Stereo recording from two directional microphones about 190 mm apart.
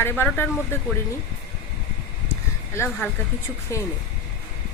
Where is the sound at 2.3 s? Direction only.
15° left (ahead or behind).